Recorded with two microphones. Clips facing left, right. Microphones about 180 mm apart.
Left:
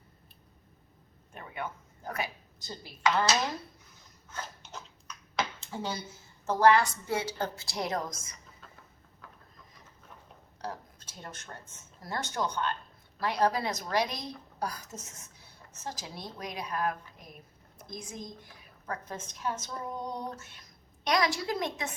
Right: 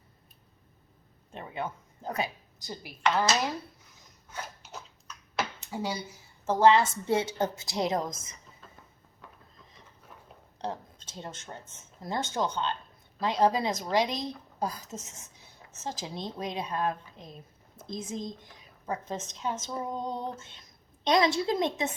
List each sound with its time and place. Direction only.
1.3 s a woman's voice: 25° right (ahead or behind)
4.3 s speech: 10° right (ahead or behind)
10.6 s a sound: 25° right (ahead or behind)
11.3 s speech: 20° right (ahead or behind)